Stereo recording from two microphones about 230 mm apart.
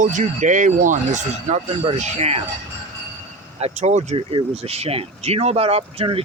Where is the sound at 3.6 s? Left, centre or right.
Right.